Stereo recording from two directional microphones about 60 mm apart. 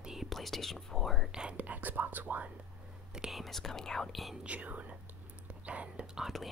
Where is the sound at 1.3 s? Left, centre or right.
Centre.